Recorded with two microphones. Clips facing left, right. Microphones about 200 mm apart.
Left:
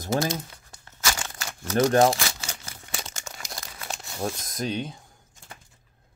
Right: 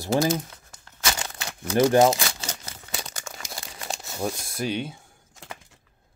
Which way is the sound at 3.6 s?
25° right (ahead or behind).